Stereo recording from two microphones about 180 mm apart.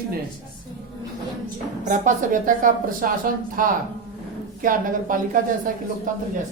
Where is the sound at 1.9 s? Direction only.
45° right (ahead or behind).